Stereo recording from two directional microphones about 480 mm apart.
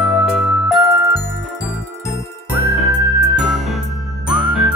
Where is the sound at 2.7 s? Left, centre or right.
Centre.